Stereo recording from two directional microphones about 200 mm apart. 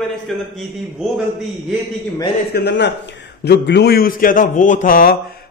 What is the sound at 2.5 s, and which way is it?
A man's voice, 60° left (ahead or behind).